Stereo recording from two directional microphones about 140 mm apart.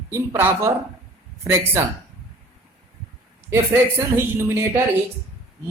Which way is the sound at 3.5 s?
15° right (ahead or behind).